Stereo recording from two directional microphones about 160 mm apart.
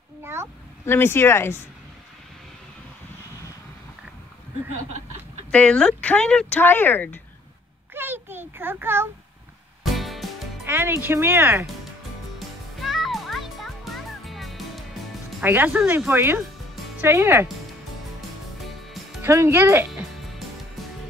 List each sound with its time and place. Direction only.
0.2 s a sound: 15° right (ahead or behind)
0.8 s speech: 15° left (ahead or behind)
5.5 s speech: 5° left (ahead or behind)
7.9 s a child's voice: 15° right (ahead or behind)
9.8 s music: centre (ahead or behind)
10.7 s speech: 15° right (ahead or behind)
12.4 s music: centre (ahead or behind)
15.4 s speech: 10° right (ahead or behind)
19.2 s speech: 15° right (ahead or behind)